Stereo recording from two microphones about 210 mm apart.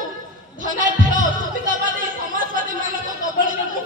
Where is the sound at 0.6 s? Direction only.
40° right (ahead or behind).